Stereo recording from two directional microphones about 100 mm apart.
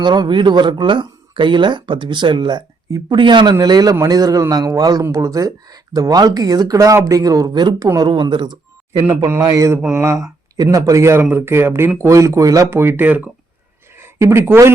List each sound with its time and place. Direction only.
0.0 s speech: 50° right (ahead or behind)
3.6 s speech: 40° right (ahead or behind)
9.3 s speech: 35° right (ahead or behind)